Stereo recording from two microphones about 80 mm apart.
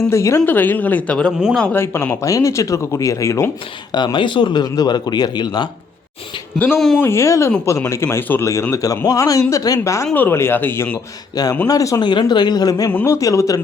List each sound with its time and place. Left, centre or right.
0.1 s speech: left
0.4 s a man's voice: left
1.7 s speech: left
3.9 s a man's voice: left
6.7 s speech: centre
7.0 s speech: left
8.7 s speech: left
10.2 s a man's voice: left
11.4 s speech: left
12.0 s a man's voice: left
13.1 s speech: left